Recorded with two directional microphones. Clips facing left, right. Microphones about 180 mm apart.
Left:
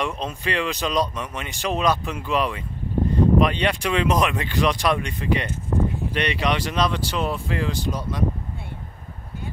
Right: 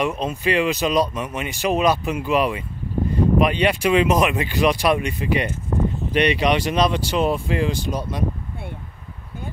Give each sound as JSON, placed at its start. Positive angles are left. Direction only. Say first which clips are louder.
{"t": 0.0, "sound": "speech", "louder": "right 5 dB", "side_deg": -5}